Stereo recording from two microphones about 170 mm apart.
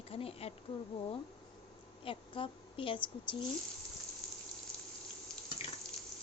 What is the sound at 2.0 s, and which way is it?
Speech, 30° left (ahead or behind).